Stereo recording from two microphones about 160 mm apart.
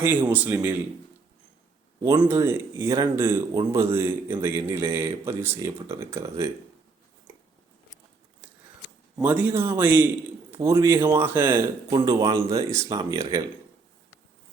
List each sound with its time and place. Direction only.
0.0 s a man's voice: 10° right (ahead or behind)
2.0 s a man's voice: 20° right (ahead or behind)
9.1 s a man's voice: 10° right (ahead or behind)
11.9 s speech: 25° right (ahead or behind)